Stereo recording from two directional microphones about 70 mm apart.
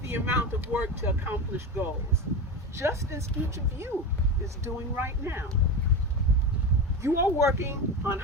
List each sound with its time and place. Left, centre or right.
0.0 s speech: right
0.7 s speech: right
2.7 s speech: right
7.0 s speech: right